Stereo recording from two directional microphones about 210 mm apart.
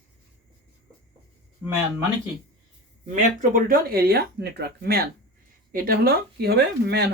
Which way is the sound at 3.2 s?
40° right (ahead or behind).